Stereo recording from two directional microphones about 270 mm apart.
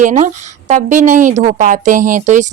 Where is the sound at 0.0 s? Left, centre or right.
Right.